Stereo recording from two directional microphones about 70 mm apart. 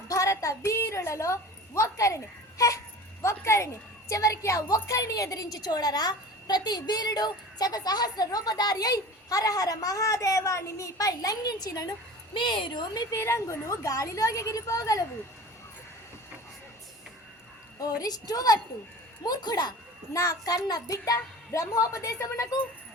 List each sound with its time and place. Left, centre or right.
0.1 s a sound: left
4.1 s a woman's voice: left
12.5 s a woman's voice: left
13.1 s a woman's voice: left
18.0 s a woman's voice: left
19.2 s a child's voice: left
20.1 s a woman's voice: left